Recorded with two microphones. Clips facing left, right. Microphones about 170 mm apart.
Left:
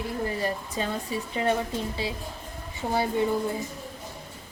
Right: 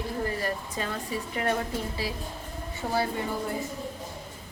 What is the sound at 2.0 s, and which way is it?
Speech, 25° left (ahead or behind).